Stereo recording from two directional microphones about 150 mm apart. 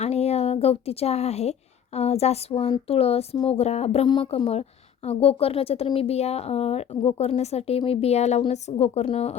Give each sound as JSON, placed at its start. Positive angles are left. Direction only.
{"t": 0.0, "sound": "a woman's voice", "side_deg": 45}
{"t": 2.8, "sound": "a sound", "side_deg": 40}
{"t": 3.4, "sound": "speech", "side_deg": 45}